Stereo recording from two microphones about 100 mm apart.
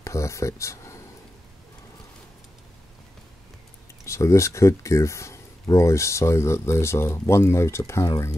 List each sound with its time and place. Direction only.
0.0 s speech: 30° left (ahead or behind)
4.0 s speech: 30° left (ahead or behind)